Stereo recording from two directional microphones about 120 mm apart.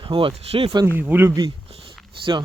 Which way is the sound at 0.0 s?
45° right (ahead or behind).